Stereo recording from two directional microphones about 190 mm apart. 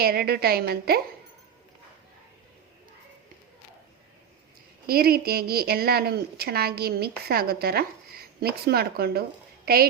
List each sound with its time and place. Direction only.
0.0 s a woman's voice: 55° right (ahead or behind)
4.9 s a woman's voice: 55° right (ahead or behind)